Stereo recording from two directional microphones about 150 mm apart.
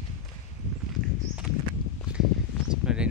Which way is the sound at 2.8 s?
5° right (ahead or behind).